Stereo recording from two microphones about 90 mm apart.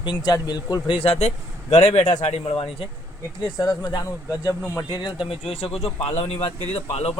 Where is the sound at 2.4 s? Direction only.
90° left.